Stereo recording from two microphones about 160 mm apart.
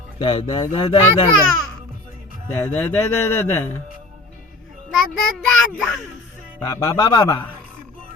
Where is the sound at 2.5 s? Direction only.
15° left (ahead or behind).